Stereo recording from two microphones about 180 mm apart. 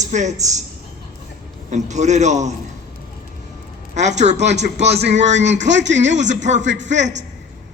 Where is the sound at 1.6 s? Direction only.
40° right (ahead or behind).